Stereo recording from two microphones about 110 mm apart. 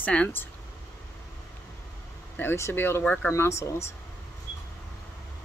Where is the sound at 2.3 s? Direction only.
20° left (ahead or behind).